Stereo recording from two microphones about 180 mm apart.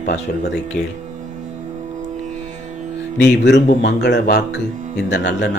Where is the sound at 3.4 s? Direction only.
70° left (ahead or behind).